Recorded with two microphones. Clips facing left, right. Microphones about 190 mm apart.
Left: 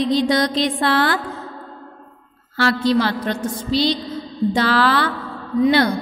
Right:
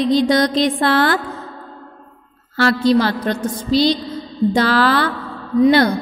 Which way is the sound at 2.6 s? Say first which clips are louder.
Right 3 dB; 45° right (ahead or behind).